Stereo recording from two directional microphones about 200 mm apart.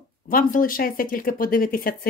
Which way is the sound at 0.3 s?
45° left (ahead or behind).